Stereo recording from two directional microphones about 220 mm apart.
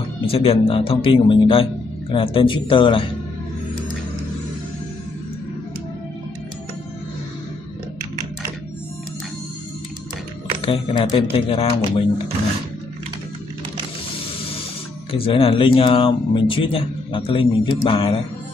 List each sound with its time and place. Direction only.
0.2 s speech: 25° left (ahead or behind)
10.6 s speech: 25° left (ahead or behind)
15.1 s speech: 25° left (ahead or behind)